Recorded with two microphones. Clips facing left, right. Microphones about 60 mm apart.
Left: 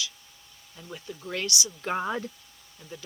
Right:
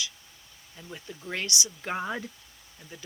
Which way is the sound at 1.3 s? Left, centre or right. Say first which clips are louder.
Left 1 dB; right.